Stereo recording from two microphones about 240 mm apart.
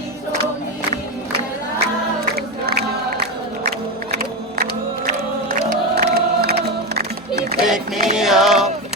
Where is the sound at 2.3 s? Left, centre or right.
Right.